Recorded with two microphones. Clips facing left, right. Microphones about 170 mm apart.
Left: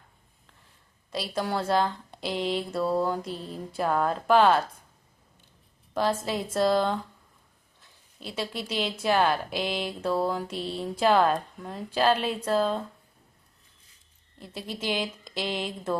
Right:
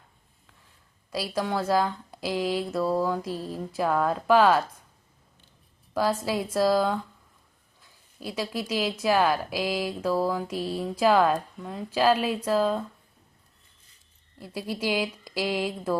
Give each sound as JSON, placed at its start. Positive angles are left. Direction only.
{"t": 1.4, "sound": "speech", "side_deg": 0}
{"t": 5.9, "sound": "a woman's voice", "side_deg": -10}
{"t": 8.5, "sound": "speech", "side_deg": -10}
{"t": 14.3, "sound": "speech", "side_deg": -10}